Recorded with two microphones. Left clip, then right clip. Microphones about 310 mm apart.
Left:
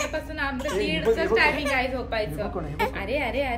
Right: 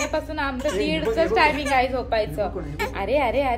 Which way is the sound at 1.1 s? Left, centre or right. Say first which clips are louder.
Right 3 dB; centre.